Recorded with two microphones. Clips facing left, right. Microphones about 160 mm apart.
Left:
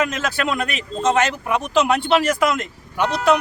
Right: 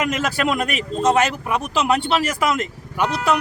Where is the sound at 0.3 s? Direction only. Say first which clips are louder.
Right 2 dB; 40° right (ahead or behind).